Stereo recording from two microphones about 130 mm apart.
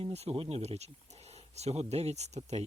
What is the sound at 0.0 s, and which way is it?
Speech, 50° right (ahead or behind).